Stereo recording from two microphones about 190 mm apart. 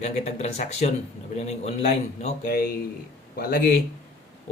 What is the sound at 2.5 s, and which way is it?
Speech, 50° left (ahead or behind).